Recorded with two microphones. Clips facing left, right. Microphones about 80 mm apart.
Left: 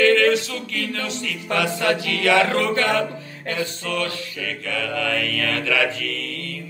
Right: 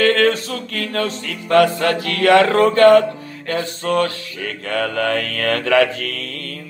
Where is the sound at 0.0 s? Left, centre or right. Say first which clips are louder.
Right 1 dB; right.